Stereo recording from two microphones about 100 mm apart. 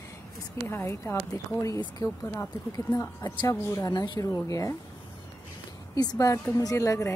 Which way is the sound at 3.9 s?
40° left (ahead or behind).